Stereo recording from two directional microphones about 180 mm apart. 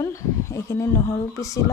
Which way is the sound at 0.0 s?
15° left (ahead or behind).